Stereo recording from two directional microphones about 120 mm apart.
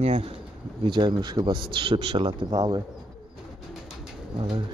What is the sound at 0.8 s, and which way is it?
A man's voice, 40° right (ahead or behind).